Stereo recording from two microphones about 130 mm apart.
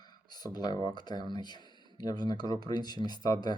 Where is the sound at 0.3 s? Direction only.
30° left (ahead or behind).